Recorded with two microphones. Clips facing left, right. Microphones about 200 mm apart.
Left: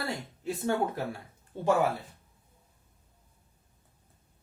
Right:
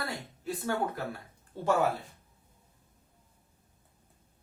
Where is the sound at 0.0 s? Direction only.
25° left (ahead or behind).